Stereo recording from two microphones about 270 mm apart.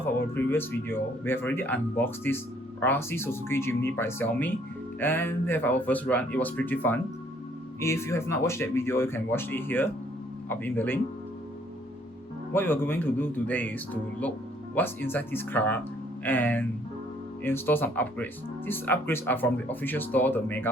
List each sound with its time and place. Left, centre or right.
0.0 s speech: centre
12.5 s speech: centre